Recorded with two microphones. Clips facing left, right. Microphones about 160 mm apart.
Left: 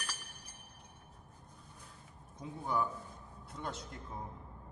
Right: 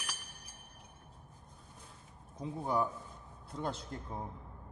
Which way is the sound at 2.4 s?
35° right (ahead or behind).